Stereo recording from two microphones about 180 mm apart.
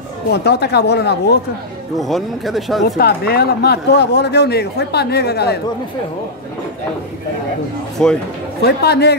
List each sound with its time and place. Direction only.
0.3 s a man's voice: 65° left (ahead or behind)
2.0 s speech: centre (ahead or behind)
3.0 s a man's voice: 60° left (ahead or behind)
8.0 s speech: 5° left (ahead or behind)
8.6 s a man's voice: 65° left (ahead or behind)